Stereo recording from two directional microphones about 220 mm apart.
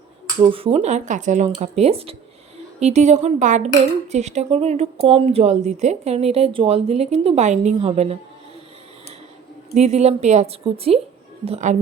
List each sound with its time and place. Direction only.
0.5 s a woman's voice: 25° right (ahead or behind)
9.7 s a woman's voice: 30° right (ahead or behind)